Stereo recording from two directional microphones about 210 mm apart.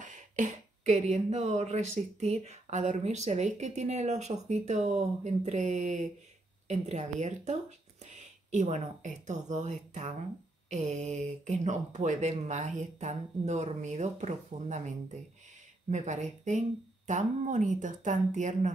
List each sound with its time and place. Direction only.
0.0 s speech: 35° right (ahead or behind)
15.9 s speech: 35° right (ahead or behind)